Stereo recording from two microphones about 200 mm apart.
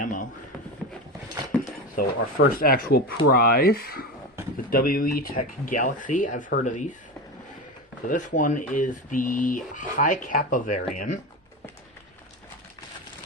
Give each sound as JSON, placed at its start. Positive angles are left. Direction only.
{"t": 0.0, "sound": "a sound", "side_deg": 40}
{"t": 1.6, "sound": "speech", "side_deg": 45}
{"t": 8.0, "sound": "speech", "side_deg": 40}